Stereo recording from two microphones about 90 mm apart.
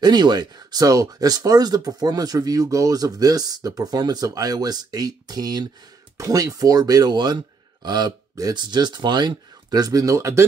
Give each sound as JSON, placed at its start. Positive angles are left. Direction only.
{"t": 0.0, "sound": "speech", "side_deg": -50}